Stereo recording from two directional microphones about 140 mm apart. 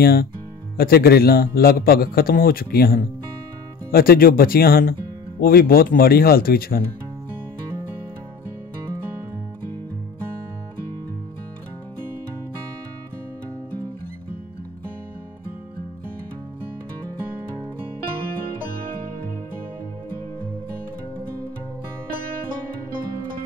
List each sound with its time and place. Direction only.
0.0 s a man's voice: 90° left